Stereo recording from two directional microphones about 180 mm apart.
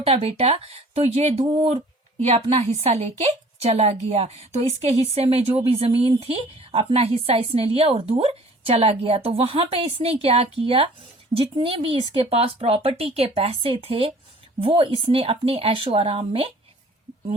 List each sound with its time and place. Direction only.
0.0 s speech: 35° right (ahead or behind)